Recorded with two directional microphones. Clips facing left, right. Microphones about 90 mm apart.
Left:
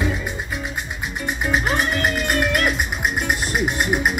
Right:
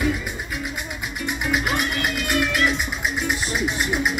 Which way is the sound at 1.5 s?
35° left (ahead or behind).